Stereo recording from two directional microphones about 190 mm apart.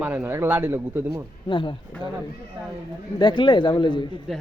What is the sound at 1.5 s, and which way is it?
Speech, 25° left (ahead or behind).